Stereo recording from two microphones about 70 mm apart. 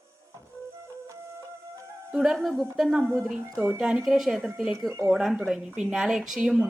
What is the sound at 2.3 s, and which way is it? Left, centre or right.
Speech, centre.